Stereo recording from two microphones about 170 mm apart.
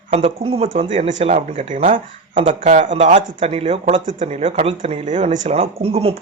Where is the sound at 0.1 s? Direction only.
35° right (ahead or behind).